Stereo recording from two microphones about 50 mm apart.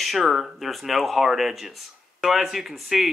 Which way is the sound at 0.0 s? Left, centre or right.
Centre.